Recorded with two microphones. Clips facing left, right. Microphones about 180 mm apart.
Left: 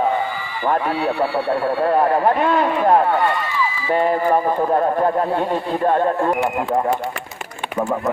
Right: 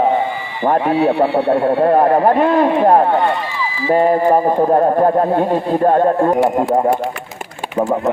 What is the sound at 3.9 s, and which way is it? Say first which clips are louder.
Speech: right 5 dB; 35° right (ahead or behind).